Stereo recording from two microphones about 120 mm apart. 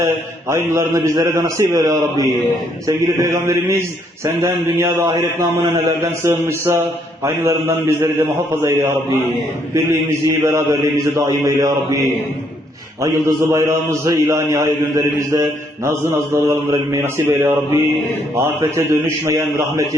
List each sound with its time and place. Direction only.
0.0 s a man's voice: 25° right (ahead or behind)
6.2 s a man's voice: 20° right (ahead or behind)
13.0 s a man's voice: 25° right (ahead or behind)